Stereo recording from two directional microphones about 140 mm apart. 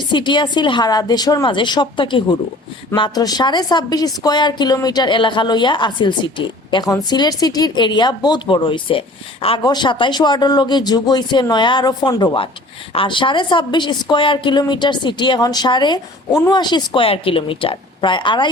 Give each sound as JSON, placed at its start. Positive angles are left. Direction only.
{"t": 0.1, "sound": "a woman's voice", "side_deg": 35}